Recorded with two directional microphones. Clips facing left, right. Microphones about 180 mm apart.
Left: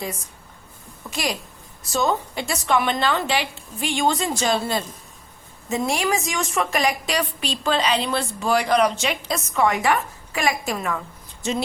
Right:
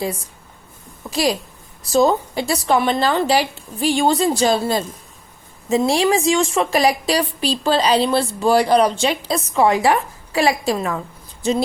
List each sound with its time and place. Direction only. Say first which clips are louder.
1.1 s a woman's voice: right 8 dB; 30° right (ahead or behind)